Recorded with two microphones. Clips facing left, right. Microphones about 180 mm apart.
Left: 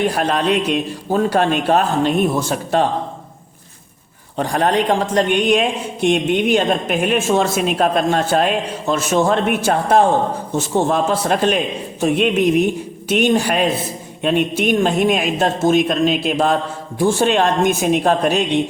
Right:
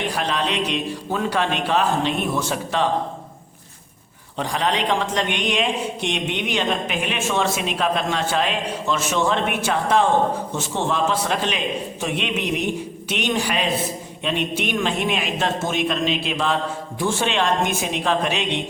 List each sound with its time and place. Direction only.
0.0 s a man's voice: 45° left (ahead or behind)
4.4 s a man's voice: 50° left (ahead or behind)